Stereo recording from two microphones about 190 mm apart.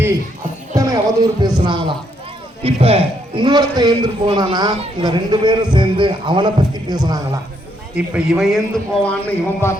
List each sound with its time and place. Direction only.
0.8 s music: 20° right (ahead or behind)
1.5 s speech: 25° right (ahead or behind)
7.9 s a man's voice: 5° right (ahead or behind)
9.0 s speech: 10° left (ahead or behind)